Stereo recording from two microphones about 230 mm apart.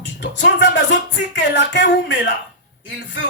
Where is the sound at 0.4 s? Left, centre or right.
Left.